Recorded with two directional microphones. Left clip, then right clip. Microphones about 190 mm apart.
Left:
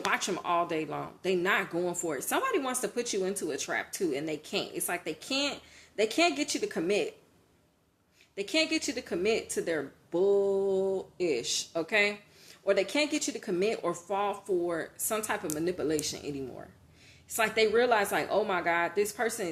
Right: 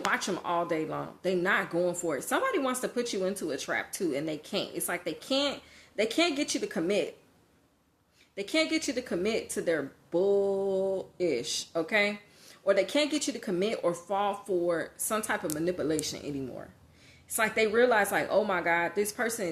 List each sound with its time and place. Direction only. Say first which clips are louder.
0.0 s speech: even; 25° right (ahead or behind)
8.4 s speech: even; 30° right (ahead or behind)